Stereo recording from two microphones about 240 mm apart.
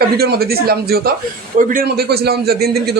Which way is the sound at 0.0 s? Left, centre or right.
Right.